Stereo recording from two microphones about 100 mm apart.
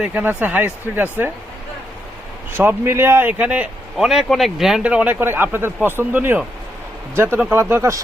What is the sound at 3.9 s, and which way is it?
Speech, 5° right (ahead or behind).